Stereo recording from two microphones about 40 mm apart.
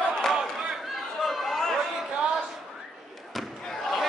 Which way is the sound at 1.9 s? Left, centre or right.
Centre.